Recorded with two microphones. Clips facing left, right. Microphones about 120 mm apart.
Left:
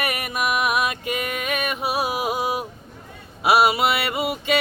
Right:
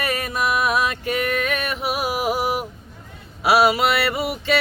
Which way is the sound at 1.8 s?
25° left (ahead or behind).